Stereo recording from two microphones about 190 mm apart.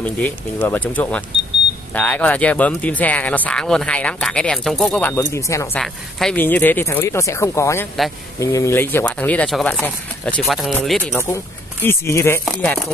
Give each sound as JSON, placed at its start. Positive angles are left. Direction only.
{"t": 0.0, "sound": "speech", "side_deg": 10}
{"t": 5.8, "sound": "speech", "side_deg": 5}
{"t": 11.1, "sound": "speech", "side_deg": 15}
{"t": 12.4, "sound": "speech", "side_deg": 0}